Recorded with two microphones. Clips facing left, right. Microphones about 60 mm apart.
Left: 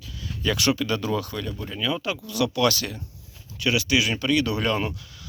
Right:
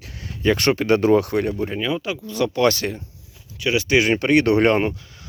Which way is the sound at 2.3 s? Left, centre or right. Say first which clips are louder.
Right 4 dB; right.